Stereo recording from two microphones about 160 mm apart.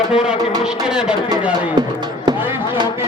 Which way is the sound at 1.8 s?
25° right (ahead or behind).